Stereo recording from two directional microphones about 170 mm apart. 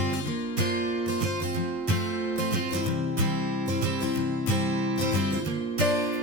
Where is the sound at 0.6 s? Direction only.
65° right (ahead or behind).